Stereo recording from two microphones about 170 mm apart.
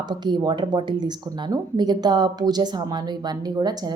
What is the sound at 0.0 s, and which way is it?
Speech, 25° right (ahead or behind).